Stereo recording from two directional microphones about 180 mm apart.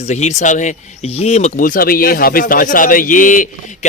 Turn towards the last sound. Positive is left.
turn(degrees=45)  # may be behind; listen again after turning